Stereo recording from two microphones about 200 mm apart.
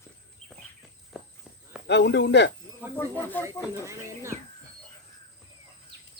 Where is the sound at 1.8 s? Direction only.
60° left (ahead or behind).